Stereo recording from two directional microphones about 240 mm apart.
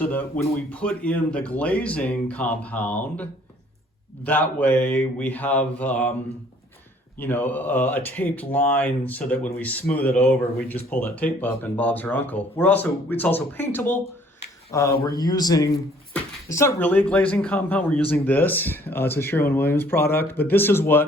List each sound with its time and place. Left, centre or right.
0.0 s speech: centre
4.3 s speech: centre
7.2 s speech: centre